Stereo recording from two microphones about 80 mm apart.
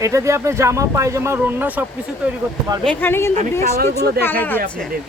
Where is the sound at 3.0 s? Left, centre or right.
Left.